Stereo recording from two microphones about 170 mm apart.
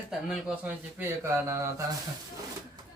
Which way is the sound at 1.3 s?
15° right (ahead or behind).